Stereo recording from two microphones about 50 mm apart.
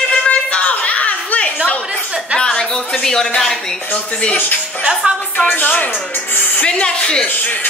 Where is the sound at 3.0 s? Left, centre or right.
Centre.